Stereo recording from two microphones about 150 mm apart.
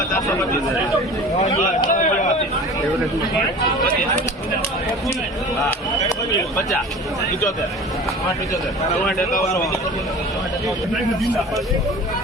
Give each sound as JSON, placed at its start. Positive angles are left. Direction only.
{"t": 1.4, "sound": "a man's voice", "side_deg": 50}
{"t": 11.2, "sound": "a man's voice", "side_deg": 0}